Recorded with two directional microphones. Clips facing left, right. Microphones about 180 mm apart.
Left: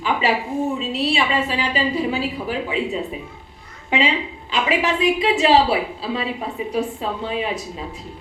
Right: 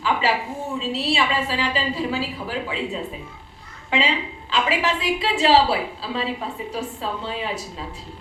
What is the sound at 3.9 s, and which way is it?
A woman's voice, 20° left (ahead or behind).